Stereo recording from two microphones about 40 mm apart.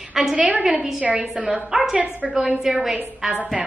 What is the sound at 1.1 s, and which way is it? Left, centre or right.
Speech, right.